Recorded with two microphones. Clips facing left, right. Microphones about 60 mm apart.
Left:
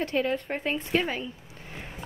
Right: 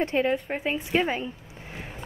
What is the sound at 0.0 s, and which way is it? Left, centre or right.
Speech, right.